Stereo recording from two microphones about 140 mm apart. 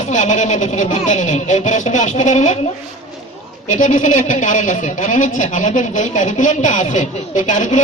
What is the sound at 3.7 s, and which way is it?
Speech, 60° left (ahead or behind).